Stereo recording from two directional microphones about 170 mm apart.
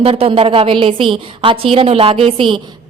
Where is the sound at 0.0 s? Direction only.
35° right (ahead or behind).